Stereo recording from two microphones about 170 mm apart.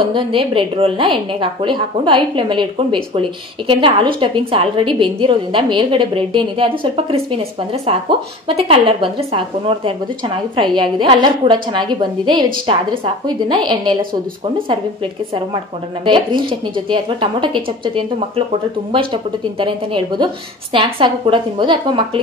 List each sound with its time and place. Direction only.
0.0 s a woman's voice: 30° right (ahead or behind)
16.1 s a woman's voice: 30° right (ahead or behind)
19.6 s a woman's voice: 30° right (ahead or behind)